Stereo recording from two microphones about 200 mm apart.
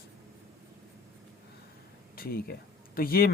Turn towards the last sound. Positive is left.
turn(degrees=50)  # may be behind; listen again after turning